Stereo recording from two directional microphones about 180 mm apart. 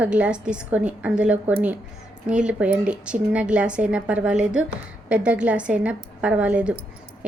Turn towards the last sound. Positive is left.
turn(degrees=-5)  # may be behind; listen again after turning